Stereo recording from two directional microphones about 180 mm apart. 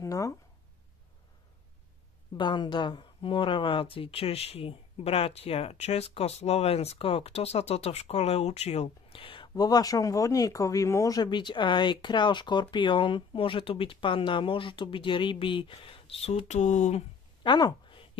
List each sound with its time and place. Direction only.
0.0 s speech: 20° left (ahead or behind)
2.3 s speech: 25° left (ahead or behind); by 17.0 s 40° left (ahead or behind)
17.4 s a sound: 25° left (ahead or behind)